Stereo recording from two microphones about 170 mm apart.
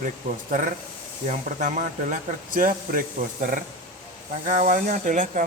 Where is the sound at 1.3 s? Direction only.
50° right (ahead or behind).